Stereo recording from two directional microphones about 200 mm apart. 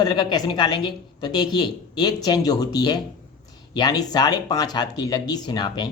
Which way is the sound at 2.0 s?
20° left (ahead or behind).